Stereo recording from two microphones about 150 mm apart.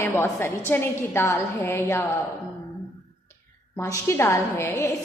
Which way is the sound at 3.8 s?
15° left (ahead or behind).